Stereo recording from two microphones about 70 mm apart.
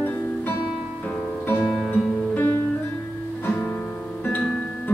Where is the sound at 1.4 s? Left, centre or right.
Left.